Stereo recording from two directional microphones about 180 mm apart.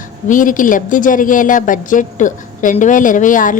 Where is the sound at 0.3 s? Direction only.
50° left (ahead or behind).